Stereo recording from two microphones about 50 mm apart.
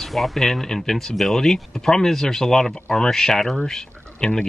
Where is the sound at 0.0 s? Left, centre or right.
Centre.